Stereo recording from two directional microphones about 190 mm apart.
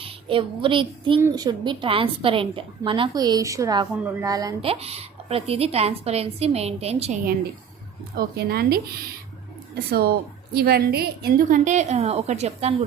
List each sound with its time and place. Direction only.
0.0 s a woman's voice: 30° right (ahead or behind)
4.6 s a woman's voice: 30° right (ahead or behind)
8.1 s a woman's voice: 55° right (ahead or behind)
11.6 s a woman's voice: 40° right (ahead or behind)